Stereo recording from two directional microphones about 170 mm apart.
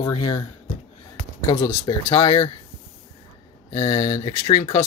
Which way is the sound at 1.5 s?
20° left (ahead or behind).